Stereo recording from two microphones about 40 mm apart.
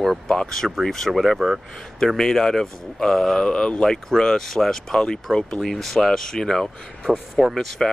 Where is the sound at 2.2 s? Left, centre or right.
Centre.